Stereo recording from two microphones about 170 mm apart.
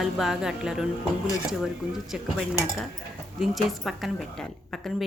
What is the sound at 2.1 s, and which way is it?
Speech, 5° right (ahead or behind).